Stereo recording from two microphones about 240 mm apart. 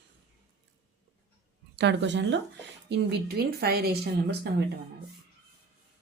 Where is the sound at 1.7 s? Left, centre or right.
Right.